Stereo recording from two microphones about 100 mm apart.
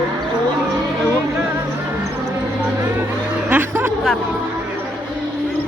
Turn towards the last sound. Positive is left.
turn(degrees=-20)  # may be behind; listen again after turning